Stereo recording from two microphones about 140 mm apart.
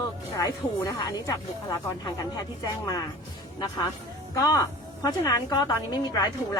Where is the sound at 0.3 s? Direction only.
20° left (ahead or behind).